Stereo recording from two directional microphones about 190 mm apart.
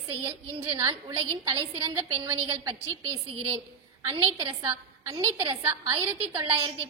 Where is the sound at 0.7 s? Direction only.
20° right (ahead or behind).